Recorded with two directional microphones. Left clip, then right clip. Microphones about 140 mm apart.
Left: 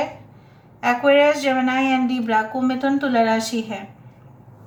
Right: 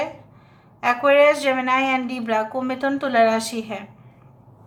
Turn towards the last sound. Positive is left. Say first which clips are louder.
# left 2 dB
turn(degrees=-45)  # may be behind; listen again after turning